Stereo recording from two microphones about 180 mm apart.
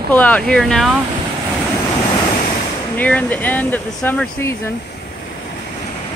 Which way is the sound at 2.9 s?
10° left (ahead or behind).